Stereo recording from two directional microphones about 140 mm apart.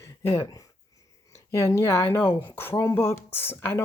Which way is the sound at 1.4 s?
20° left (ahead or behind).